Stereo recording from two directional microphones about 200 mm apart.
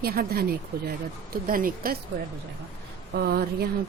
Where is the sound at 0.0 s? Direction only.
50° right (ahead or behind).